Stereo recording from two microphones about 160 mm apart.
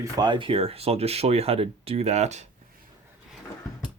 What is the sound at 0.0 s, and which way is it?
Speech, 25° right (ahead or behind).